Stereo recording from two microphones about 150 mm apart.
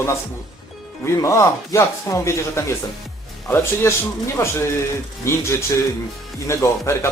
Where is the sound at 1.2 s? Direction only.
20° left (ahead or behind).